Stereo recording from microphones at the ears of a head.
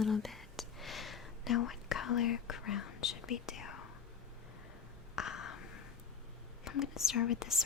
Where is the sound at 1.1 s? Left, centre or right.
Left.